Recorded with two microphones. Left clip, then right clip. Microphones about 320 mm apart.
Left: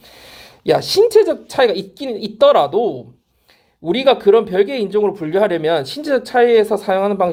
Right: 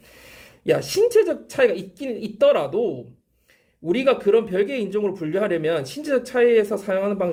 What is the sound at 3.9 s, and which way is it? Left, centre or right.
Speech, centre.